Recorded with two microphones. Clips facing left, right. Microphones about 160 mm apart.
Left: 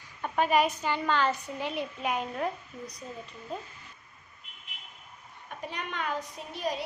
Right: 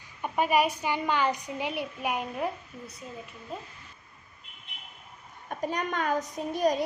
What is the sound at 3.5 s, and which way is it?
Speech, 5° right (ahead or behind).